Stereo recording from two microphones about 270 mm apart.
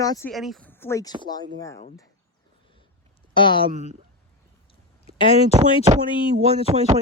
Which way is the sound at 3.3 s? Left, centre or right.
Centre.